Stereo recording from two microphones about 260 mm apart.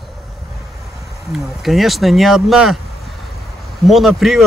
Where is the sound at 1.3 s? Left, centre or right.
Centre.